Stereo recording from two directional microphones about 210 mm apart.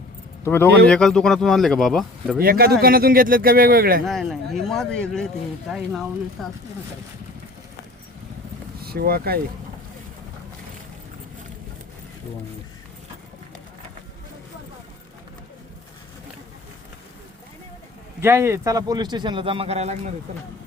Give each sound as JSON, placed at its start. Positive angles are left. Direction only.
{"t": 0.4, "sound": "speech", "side_deg": 10}
{"t": 2.4, "sound": "speech", "side_deg": -45}
{"t": 4.0, "sound": "speech", "side_deg": 0}
{"t": 8.8, "sound": "speech", "side_deg": -45}
{"t": 18.2, "sound": "speech", "side_deg": -10}